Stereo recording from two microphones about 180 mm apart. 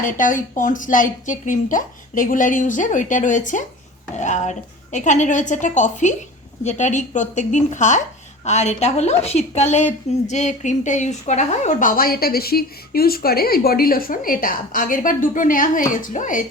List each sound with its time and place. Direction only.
0.0 s a woman's voice: 45° left (ahead or behind)